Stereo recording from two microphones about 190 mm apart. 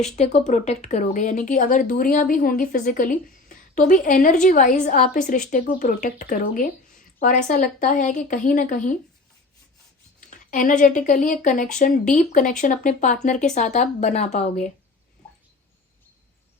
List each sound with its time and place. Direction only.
0.2 s a woman's voice: 35° left (ahead or behind)
10.2 s a woman's voice: 40° left (ahead or behind)